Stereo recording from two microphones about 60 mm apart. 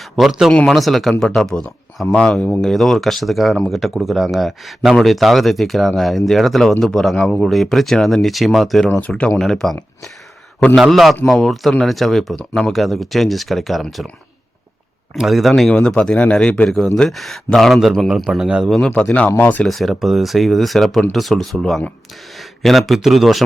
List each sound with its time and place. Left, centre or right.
0.2 s speech: centre; by 2.6 s left
2.6 s speech: centre
9.0 s speech: left
9.4 s speech: centre
10.8 s speech: centre
15.3 s speech: centre
15.7 s speech: centre
16.6 s speech: centre
18.8 s speech: left
19.6 s speech: centre